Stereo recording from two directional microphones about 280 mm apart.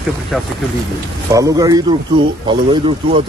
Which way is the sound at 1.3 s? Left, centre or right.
Centre.